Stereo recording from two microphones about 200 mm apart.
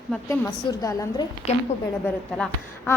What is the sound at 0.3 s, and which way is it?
A woman's voice, 15° left (ahead or behind).